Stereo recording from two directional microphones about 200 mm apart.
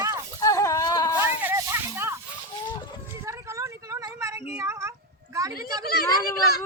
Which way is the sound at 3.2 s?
15° right (ahead or behind).